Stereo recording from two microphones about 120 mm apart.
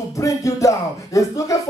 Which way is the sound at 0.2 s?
25° left (ahead or behind).